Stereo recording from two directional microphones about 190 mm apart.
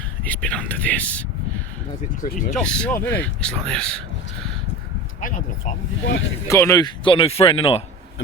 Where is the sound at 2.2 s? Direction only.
45° left (ahead or behind).